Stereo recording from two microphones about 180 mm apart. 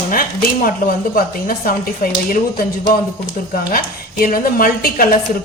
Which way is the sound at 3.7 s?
50° left (ahead or behind).